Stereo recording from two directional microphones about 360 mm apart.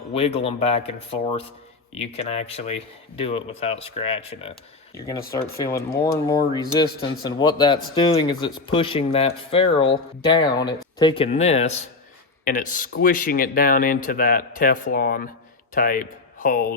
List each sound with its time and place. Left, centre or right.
0.1 s speech: centre